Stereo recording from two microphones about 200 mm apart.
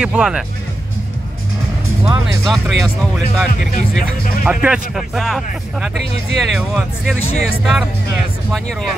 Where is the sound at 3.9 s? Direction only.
5° right (ahead or behind).